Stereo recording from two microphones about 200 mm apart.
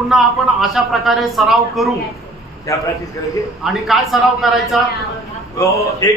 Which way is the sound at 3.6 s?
Centre (ahead or behind).